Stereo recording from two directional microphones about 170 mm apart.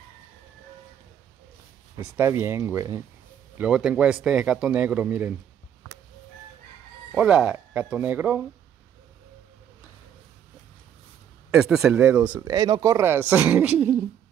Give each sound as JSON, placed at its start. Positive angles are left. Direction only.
{"t": 2.0, "sound": "a man's voice", "side_deg": -15}
{"t": 3.5, "sound": "a man's voice", "side_deg": -5}
{"t": 7.2, "sound": "a man's voice", "side_deg": -5}
{"t": 11.5, "sound": "speech", "side_deg": -5}
{"t": 12.4, "sound": "a man's voice", "side_deg": -25}